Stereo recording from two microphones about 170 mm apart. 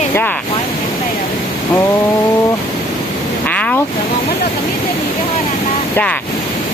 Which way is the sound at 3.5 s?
10° left (ahead or behind).